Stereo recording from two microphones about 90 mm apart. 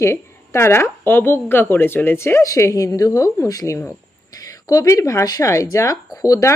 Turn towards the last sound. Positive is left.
turn(degrees=40)  # may be behind; listen again after turning